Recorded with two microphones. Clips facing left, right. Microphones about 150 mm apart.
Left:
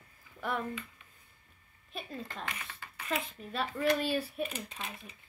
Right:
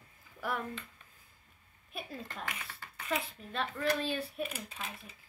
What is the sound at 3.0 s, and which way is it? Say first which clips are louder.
Speech: even; 5° left (ahead or behind).